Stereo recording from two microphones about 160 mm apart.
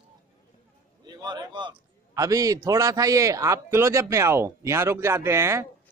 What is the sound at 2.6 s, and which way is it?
A man's voice, 20° right (ahead or behind).